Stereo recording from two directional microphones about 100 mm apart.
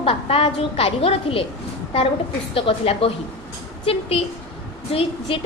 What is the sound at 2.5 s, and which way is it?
Speech, 65° left (ahead or behind).